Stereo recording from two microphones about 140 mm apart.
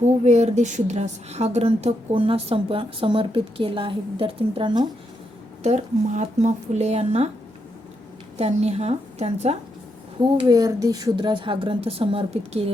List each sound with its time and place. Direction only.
0.0 s a woman's voice: 55° right (ahead or behind); by 4.9 s 35° right (ahead or behind)
5.6 s a woman's voice: 55° right (ahead or behind)
8.4 s a woman's voice: 50° right (ahead or behind)
10.2 s speech: 30° right (ahead or behind)